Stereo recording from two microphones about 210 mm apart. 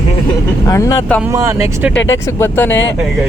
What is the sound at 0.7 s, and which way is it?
Speech, 15° left (ahead or behind).